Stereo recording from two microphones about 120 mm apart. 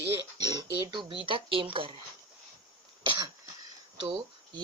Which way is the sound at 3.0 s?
35° right (ahead or behind).